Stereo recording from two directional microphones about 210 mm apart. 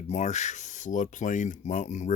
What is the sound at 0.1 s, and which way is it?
Speech, 35° left (ahead or behind).